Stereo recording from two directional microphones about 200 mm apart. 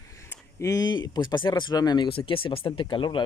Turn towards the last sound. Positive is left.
turn(degrees=25)  # may be behind; listen again after turning